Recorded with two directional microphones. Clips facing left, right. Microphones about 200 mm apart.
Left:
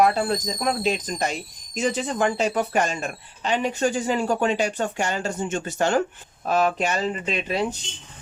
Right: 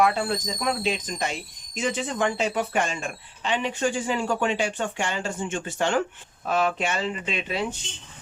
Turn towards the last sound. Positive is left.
turn(degrees=40)  # may be behind; listen again after turning